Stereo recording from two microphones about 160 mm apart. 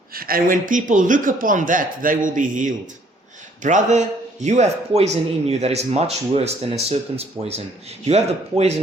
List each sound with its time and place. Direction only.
0.1 s a man's voice: 65° right (ahead or behind); by 8.7 s 40° right (ahead or behind)